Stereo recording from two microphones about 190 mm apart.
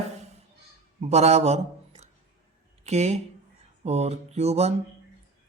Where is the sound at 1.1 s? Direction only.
35° right (ahead or behind).